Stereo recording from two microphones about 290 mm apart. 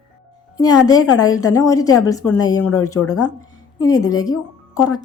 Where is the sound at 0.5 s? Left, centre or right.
Centre.